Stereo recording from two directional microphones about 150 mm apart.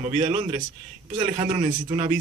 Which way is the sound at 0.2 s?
35° right (ahead or behind).